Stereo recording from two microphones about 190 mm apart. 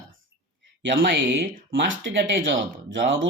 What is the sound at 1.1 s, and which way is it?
Speech, 65° right (ahead or behind).